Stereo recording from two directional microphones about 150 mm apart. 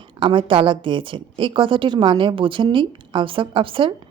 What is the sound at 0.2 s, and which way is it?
A woman's voice, 35° right (ahead or behind).